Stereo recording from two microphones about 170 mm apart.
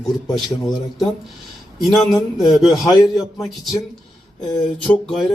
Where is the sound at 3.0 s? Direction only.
15° left (ahead or behind).